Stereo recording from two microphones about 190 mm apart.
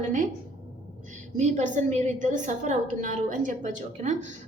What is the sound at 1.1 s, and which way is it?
A woman's voice, 40° right (ahead or behind).